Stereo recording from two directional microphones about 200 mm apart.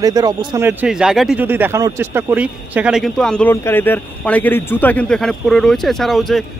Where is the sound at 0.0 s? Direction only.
20° right (ahead or behind).